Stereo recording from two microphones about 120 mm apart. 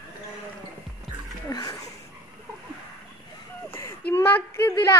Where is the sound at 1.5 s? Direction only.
35° left (ahead or behind).